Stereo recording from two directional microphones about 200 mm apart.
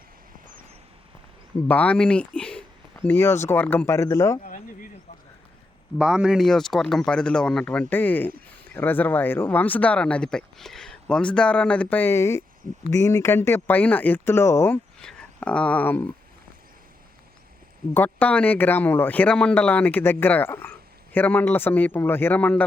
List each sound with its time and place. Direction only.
1.6 s speech: 5° left (ahead or behind)
4.4 s a sound: 40° left (ahead or behind)
6.0 s speech: 5° right (ahead or behind)
17.9 s speech: 10° left (ahead or behind)